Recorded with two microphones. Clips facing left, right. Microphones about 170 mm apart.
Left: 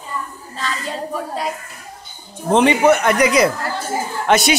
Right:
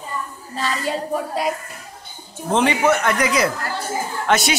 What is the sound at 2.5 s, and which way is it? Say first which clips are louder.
Speech: left 4 dB; 20° left (ahead or behind).